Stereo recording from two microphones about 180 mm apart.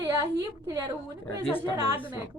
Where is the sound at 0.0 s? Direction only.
20° right (ahead or behind).